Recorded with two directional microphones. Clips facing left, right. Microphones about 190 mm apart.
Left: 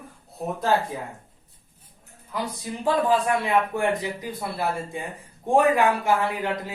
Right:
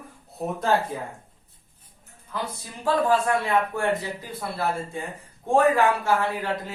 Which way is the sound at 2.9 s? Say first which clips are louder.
Even; 15° left (ahead or behind).